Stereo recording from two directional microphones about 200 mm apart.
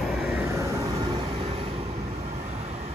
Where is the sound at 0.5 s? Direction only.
15° right (ahead or behind).